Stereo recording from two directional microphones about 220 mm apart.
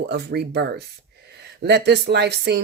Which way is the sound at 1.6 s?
50° right (ahead or behind).